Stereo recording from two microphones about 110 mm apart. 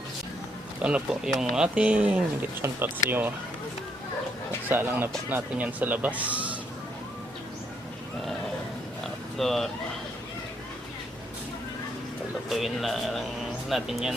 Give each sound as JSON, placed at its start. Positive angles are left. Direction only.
{"t": 0.8, "sound": "speech", "side_deg": -10}
{"t": 4.7, "sound": "speech", "side_deg": -20}
{"t": 9.4, "sound": "speech", "side_deg": 0}
{"t": 12.5, "sound": "speech", "side_deg": 0}